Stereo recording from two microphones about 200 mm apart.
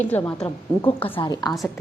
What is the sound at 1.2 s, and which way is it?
Speech, 20° left (ahead or behind).